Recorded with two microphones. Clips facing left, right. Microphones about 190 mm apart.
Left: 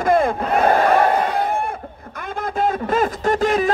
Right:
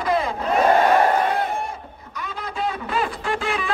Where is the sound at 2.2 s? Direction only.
50° left (ahead or behind).